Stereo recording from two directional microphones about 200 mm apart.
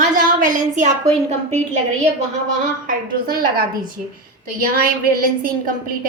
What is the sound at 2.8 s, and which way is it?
Speech, 45° right (ahead or behind).